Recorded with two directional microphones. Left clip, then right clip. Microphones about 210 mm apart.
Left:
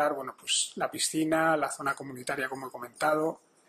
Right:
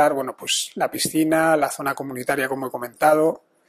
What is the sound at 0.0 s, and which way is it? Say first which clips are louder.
Speech: right 10 dB; 35° right (ahead or behind).